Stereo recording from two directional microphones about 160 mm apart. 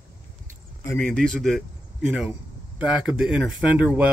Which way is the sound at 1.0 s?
5° left (ahead or behind).